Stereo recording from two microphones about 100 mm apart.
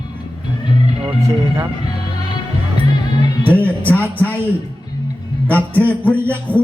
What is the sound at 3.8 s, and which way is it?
Speech, 15° left (ahead or behind).